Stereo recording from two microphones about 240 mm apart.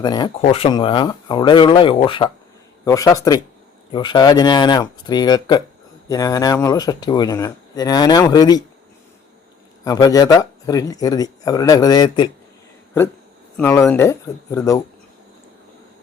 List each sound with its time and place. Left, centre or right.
0.0 s speech: centre
9.8 s speech: centre
13.6 s speech: centre